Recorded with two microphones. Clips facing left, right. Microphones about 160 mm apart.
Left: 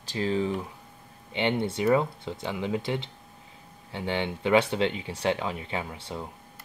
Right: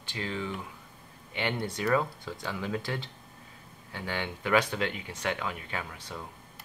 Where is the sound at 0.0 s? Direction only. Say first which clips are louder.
Left 8 dB; 35° left (ahead or behind).